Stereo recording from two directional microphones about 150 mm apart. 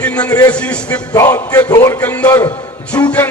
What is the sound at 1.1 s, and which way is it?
Speech, 20° left (ahead or behind).